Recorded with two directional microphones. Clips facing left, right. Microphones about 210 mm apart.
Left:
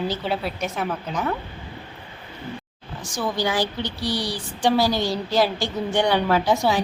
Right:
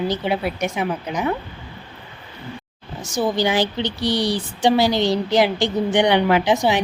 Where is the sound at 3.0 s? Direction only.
20° right (ahead or behind).